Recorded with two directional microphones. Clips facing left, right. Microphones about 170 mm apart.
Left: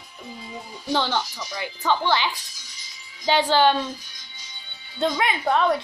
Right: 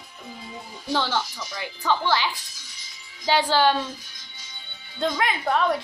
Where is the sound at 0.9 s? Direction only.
15° left (ahead or behind).